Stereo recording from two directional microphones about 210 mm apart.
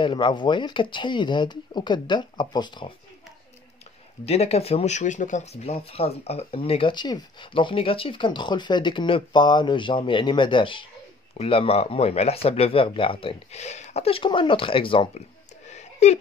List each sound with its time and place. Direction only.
0.0 s speech: 20° left (ahead or behind)
4.3 s speech: 30° left (ahead or behind)
15.7 s a sound: 30° left (ahead or behind)